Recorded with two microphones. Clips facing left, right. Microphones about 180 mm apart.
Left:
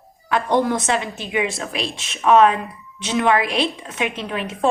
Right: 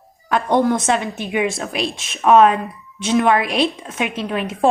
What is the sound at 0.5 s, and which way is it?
A woman's voice, 50° right (ahead or behind).